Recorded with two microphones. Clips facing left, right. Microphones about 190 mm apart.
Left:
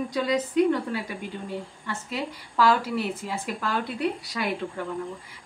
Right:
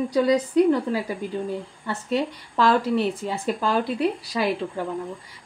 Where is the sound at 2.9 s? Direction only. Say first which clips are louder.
Right 5 dB; 30° right (ahead or behind).